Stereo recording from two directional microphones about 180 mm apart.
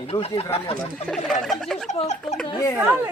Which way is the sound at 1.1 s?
5° left (ahead or behind).